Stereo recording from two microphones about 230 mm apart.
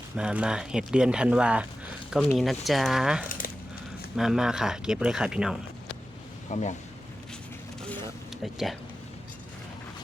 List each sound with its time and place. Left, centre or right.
0.2 s speech: centre
3.2 s a sound: left
4.2 s speech: centre
6.5 s speech: left
8.4 s speech: centre